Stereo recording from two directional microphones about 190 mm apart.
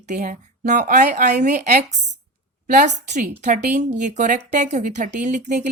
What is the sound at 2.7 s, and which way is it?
Speech, 40° right (ahead or behind).